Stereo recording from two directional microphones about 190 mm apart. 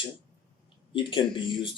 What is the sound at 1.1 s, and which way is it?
Speech, 25° left (ahead or behind).